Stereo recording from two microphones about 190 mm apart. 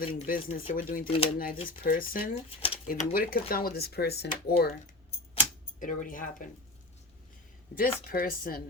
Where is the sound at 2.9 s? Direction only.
50° left (ahead or behind).